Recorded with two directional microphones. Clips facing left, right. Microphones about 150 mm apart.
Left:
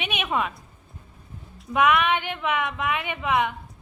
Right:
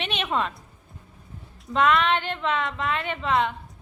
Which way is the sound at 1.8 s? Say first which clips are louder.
Even; 15° left (ahead or behind).